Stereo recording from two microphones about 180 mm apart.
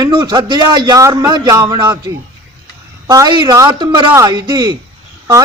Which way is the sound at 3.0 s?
20° right (ahead or behind).